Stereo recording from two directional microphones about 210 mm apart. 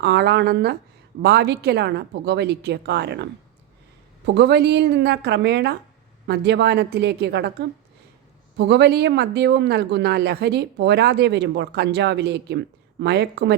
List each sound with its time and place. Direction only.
0.0 s speech: 55° right (ahead or behind)
4.3 s speech: 55° right (ahead or behind)